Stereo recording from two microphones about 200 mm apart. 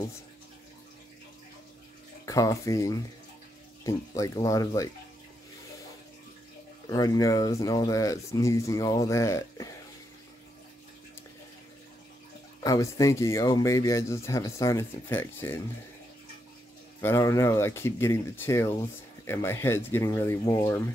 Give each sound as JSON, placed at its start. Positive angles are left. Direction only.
{"t": 2.2, "sound": "speech", "side_deg": 15}
{"t": 6.9, "sound": "speech", "side_deg": 20}
{"t": 12.5, "sound": "speech", "side_deg": 15}
{"t": 17.0, "sound": "speech", "side_deg": 15}